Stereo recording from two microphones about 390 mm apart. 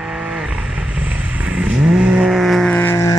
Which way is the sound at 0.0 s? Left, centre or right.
Centre.